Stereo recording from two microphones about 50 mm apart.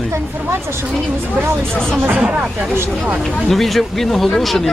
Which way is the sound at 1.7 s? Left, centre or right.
Centre.